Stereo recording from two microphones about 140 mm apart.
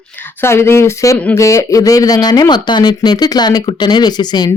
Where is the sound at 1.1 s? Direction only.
10° left (ahead or behind).